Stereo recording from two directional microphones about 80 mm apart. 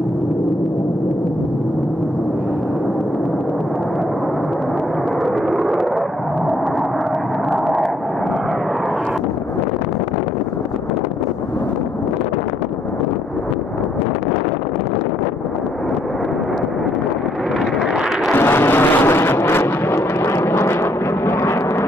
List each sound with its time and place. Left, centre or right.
5.2 s vehicle: centre
18.3 s vehicle: left